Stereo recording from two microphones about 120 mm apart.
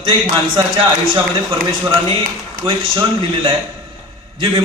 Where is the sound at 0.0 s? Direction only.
45° right (ahead or behind).